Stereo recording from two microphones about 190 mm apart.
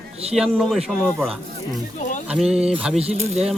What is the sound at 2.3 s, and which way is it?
Speech, 5° right (ahead or behind).